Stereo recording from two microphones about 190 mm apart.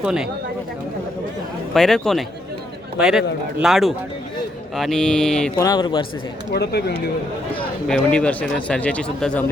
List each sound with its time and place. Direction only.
0.0 s speech: 5° right (ahead or behind)
1.7 s speech: centre (ahead or behind)
5.5 s speech: 20° left (ahead or behind)
6.5 s speech: 60° left (ahead or behind)
7.9 s speech: 5° left (ahead or behind)